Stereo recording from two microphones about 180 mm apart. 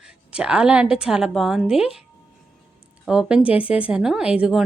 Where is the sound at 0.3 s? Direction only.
5° right (ahead or behind).